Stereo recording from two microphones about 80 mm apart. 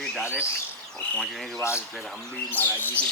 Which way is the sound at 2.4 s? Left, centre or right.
Left.